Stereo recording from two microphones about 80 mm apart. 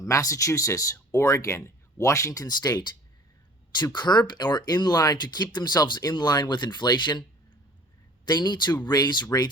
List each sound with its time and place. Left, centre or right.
0.0 s speech: left